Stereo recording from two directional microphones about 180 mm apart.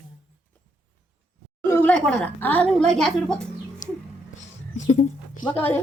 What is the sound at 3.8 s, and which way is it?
Cat, 45° left (ahead or behind).